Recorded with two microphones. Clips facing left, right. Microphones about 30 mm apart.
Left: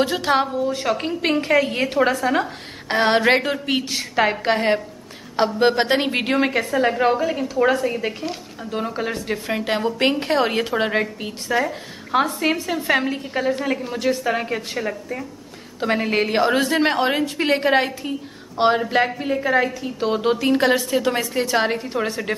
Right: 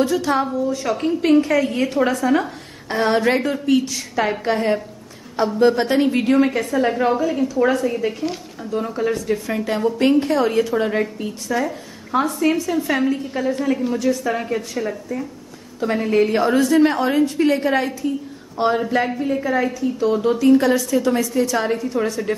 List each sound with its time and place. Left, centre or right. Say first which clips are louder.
0.0 s a woman's voice: even; left
2.3 s a woman's voice: right 2 dB; left
2.9 s a woman's voice: left 1 dB; left
6.7 s a woman's voice: even; left
15.8 s a woman's voice: right 2 dB; left
19.3 s a woman's voice: left 3 dB; left
20.0 s a woman's voice: right 1 dB; left